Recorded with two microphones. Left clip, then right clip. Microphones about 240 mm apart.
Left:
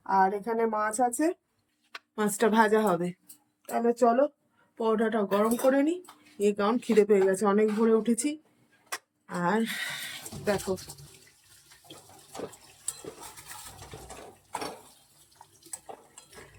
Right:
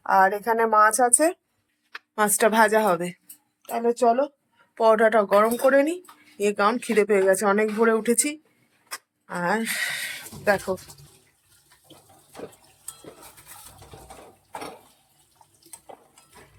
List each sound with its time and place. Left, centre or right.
0.2 s speech: right
2.1 s a woman's voice: centre
4.7 s speech: centre